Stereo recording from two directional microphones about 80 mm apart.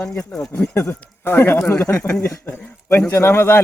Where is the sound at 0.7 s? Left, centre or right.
Left.